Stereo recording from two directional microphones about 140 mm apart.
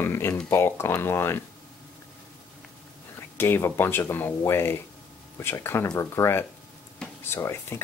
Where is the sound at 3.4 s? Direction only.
15° left (ahead or behind).